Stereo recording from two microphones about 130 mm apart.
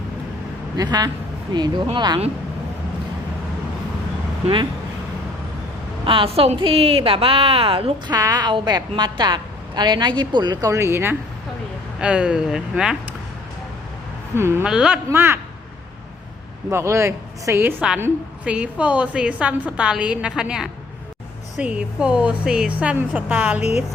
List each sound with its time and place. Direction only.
0.8 s speech: 30° right (ahead or behind)
6.1 s a woman's voice: 45° right (ahead or behind); by 11.2 s 20° right (ahead or behind)
11.9 s a woman's voice: 10° right (ahead or behind)
14.3 s speech: 20° right (ahead or behind)
14.6 s a woman's voice: 5° right (ahead or behind)
16.6 s a woman's voice: 20° right (ahead or behind)